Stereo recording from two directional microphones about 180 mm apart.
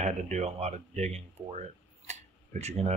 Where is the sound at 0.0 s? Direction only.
40° right (ahead or behind).